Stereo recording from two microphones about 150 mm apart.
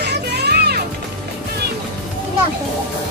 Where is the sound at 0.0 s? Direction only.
90° right.